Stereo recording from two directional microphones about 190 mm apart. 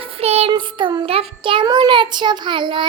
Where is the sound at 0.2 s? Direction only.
30° right (ahead or behind).